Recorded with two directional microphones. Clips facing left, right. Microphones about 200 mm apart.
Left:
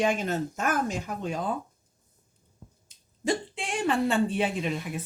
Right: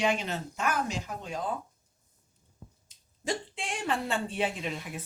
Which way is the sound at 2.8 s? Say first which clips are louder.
Left 6 dB; 55° left (ahead or behind).